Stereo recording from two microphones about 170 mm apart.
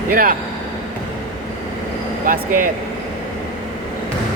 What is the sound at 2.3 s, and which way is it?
Vehicle, 55° right (ahead or behind).